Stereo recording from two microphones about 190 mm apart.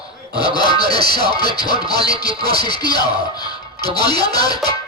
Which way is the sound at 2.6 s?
20° left (ahead or behind).